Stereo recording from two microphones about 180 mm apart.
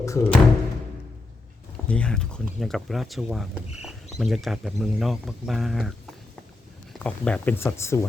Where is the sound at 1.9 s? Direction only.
5° left (ahead or behind).